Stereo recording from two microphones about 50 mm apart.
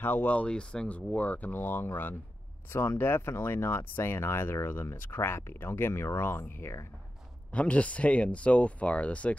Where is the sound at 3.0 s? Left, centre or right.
Left.